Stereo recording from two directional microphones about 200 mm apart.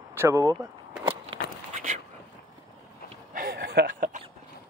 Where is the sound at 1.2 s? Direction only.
30° right (ahead or behind).